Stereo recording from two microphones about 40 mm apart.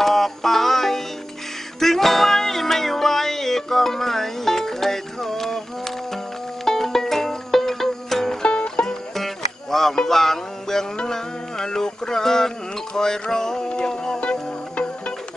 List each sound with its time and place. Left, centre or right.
0.0 s music: centre
6.6 s music: centre
8.4 s music: left
8.8 s music: centre
14.2 s music: left